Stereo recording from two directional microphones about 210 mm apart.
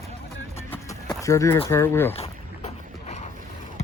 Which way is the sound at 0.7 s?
5° left (ahead or behind).